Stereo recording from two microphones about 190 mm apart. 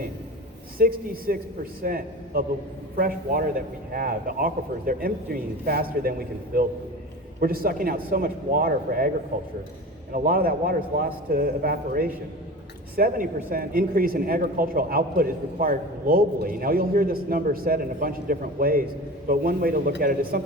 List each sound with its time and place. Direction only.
0.8 s a man's voice: 50° right (ahead or behind)